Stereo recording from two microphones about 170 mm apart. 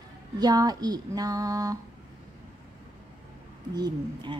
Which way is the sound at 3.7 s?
25° right (ahead or behind).